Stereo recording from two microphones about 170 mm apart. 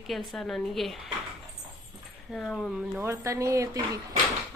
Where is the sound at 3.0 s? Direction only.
15° right (ahead or behind).